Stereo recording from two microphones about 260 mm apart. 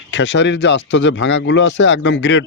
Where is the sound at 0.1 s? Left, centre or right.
Left.